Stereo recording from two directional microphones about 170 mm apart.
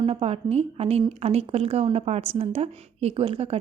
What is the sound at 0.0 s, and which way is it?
A woman's voice, 35° right (ahead or behind).